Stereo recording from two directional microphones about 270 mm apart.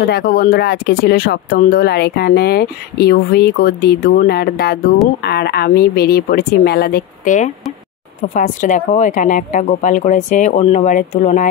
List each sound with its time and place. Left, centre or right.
0.0 s a woman's voice: left